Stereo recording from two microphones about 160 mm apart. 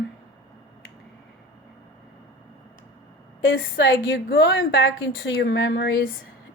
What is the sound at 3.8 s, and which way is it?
Speech, 90° left.